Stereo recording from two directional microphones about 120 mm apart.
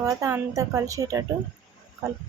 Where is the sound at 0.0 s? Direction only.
25° right (ahead or behind).